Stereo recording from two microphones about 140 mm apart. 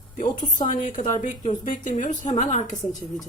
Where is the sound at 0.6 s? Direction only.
65° left (ahead or behind).